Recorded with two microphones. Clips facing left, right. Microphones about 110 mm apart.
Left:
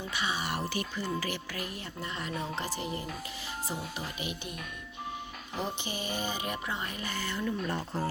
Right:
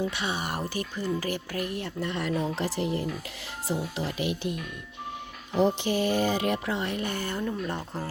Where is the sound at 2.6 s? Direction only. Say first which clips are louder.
Right 7 dB; 85° right; by 7.4 s 50° right (ahead or behind).